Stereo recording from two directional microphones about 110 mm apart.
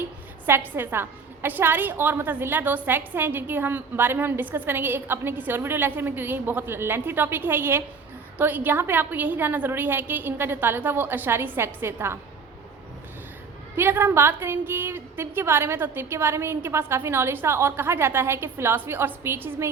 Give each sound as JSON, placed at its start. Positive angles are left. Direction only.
{"t": 0.0, "sound": "a woman's voice", "side_deg": -20}
{"t": 13.7, "sound": "a woman's voice", "side_deg": -20}